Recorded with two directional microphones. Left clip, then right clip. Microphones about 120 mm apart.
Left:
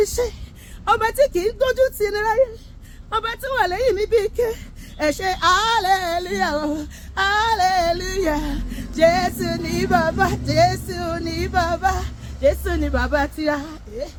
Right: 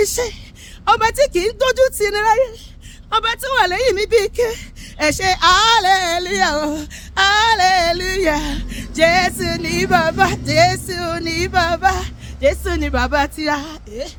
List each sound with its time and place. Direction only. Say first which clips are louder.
0.0 s speech: right 2 dB; 40° right (ahead or behind)
0.9 s speech: right 3 dB; 30° right (ahead or behind)
3.1 s a woman's voice: right 5 dB; 45° right (ahead or behind)
3.6 s speech: right 3 dB; 35° right (ahead or behind)
11.2 s speech: right 5 dB; 45° right (ahead or behind)
13.6 s a woman's voice: right 3 dB; 70° right (ahead or behind)